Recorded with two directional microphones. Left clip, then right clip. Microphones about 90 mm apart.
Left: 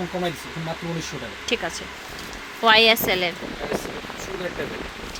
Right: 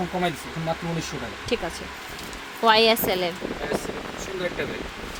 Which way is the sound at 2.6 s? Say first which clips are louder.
Left 2 dB; 15° right (ahead or behind).